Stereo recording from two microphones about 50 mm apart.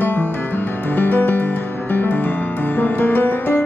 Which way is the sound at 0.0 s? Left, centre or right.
Left.